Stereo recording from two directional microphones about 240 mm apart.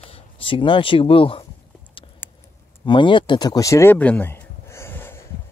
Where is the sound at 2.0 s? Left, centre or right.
Left.